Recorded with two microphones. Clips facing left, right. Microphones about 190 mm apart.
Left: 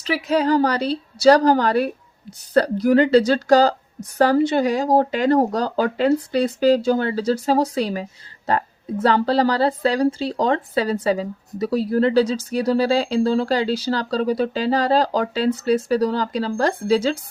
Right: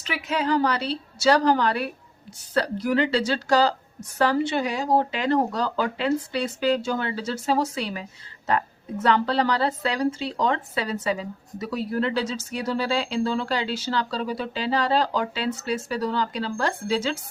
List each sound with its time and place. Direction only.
0.0 s a woman's voice: 40° left (ahead or behind)